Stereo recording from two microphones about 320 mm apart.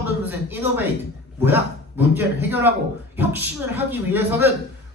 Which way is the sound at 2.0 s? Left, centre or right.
Centre.